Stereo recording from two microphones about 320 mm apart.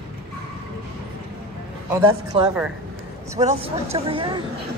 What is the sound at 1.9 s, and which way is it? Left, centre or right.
Speech, centre.